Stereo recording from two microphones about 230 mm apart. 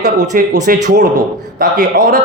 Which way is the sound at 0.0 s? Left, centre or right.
Right.